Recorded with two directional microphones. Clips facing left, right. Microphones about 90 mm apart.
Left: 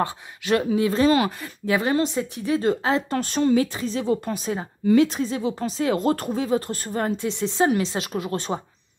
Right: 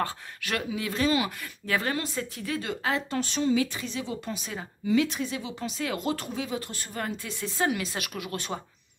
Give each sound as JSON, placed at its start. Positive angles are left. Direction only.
{"t": 0.0, "sound": "speech", "side_deg": 25}
{"t": 1.4, "sound": "speech", "side_deg": 20}
{"t": 2.6, "sound": "speech", "side_deg": 35}
{"t": 3.1, "sound": "speech", "side_deg": 45}
{"t": 6.0, "sound": "speech", "side_deg": 45}